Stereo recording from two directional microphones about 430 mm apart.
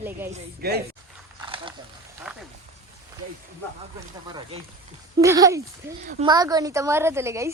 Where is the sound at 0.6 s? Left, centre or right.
Right.